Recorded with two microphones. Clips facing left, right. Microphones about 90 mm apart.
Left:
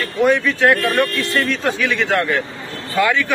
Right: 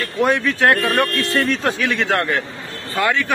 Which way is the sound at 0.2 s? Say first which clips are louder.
Left 2 dB; 40° right (ahead or behind).